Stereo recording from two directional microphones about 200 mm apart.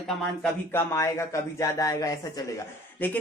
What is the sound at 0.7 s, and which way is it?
Speech, 15° left (ahead or behind).